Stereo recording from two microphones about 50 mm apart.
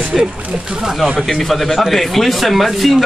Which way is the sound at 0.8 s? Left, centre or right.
Centre.